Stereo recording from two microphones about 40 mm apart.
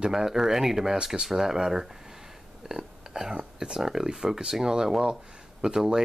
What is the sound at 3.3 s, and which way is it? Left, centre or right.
Speech, centre.